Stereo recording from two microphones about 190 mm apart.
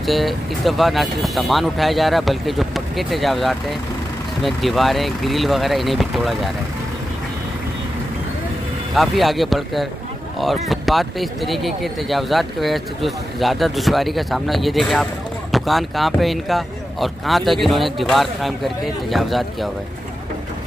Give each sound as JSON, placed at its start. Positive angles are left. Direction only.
{"t": 0.0, "sound": "speech", "side_deg": 0}
{"t": 8.9, "sound": "speech", "side_deg": 0}